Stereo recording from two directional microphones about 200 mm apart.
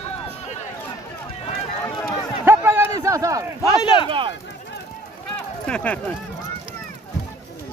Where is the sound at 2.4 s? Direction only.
10° right (ahead or behind).